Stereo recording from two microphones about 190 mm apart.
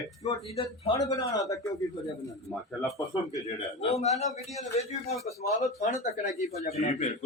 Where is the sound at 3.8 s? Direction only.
35° left (ahead or behind).